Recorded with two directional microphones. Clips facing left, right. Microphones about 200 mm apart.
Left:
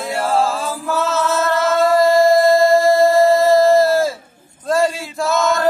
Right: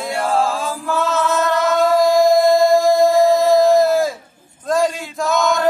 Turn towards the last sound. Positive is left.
turn(degrees=0)  # may be behind; listen again after turning